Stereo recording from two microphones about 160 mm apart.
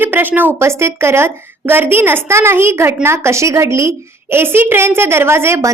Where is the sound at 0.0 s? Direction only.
10° right (ahead or behind).